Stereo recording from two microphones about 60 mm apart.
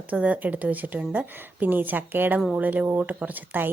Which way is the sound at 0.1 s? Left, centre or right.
Right.